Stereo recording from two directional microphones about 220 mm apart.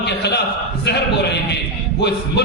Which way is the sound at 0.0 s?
50° left (ahead or behind).